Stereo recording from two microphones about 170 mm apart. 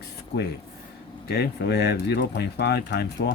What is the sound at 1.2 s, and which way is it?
Speech, 70° left (ahead or behind).